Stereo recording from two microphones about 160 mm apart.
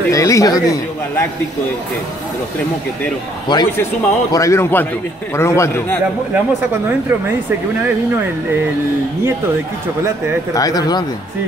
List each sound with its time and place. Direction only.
0.1 s speech: 20° left (ahead or behind)
3.5 s a man's voice: 25° left (ahead or behind)
6.3 s speech: 10° right (ahead or behind)
10.5 s speech: 25° left (ahead or behind)